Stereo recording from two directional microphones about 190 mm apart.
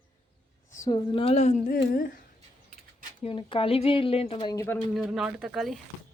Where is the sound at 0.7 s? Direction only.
20° left (ahead or behind); by 2.2 s 45° left (ahead or behind).